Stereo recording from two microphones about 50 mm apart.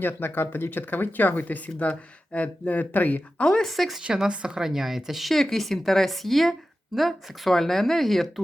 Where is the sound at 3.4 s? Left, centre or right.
Centre.